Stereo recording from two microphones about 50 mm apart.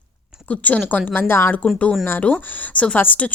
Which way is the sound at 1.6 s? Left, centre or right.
Left.